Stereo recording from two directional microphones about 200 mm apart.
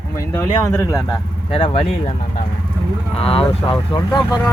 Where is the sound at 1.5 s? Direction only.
25° left (ahead or behind).